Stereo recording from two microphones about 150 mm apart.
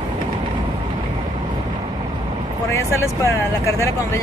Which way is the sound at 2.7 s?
20° left (ahead or behind).